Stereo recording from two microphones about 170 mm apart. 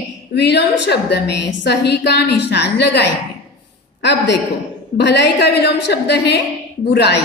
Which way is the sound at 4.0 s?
90° left.